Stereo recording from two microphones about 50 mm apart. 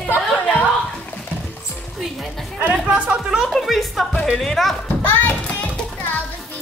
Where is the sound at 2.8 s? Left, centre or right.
Centre.